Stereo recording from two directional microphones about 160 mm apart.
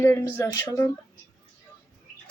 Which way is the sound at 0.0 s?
15° left (ahead or behind).